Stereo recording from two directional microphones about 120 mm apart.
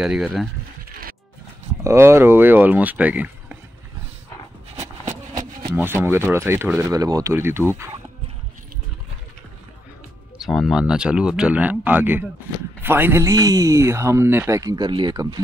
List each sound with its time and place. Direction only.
0.0 s speech: 5° right (ahead or behind)
1.8 s speech: 25° right (ahead or behind)
5.8 s speech: 20° right (ahead or behind)
10.4 s speech: centre (ahead or behind); by 14.6 s 20° right (ahead or behind)
14.6 s speech: 35° right (ahead or behind)